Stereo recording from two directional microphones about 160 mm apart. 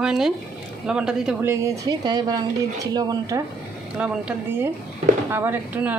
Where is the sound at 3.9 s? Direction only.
5° right (ahead or behind).